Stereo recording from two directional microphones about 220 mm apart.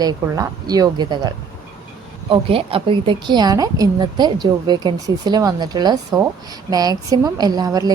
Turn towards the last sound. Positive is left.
turn(degrees=-15)  # may be behind; listen again after turning